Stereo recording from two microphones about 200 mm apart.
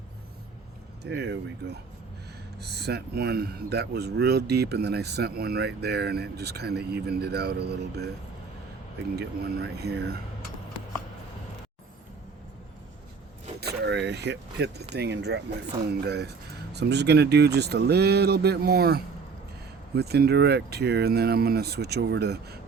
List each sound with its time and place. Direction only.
1.0 s speech: 55° right (ahead or behind)
9.1 s speech: 50° right (ahead or behind)
13.6 s speech: 55° right (ahead or behind)